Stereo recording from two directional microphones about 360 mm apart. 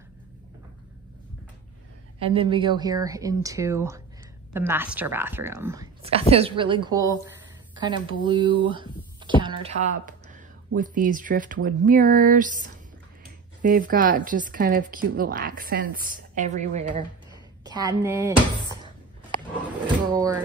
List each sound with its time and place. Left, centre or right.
2.1 s speech: centre
17.6 s speech: centre
20.1 s speech: centre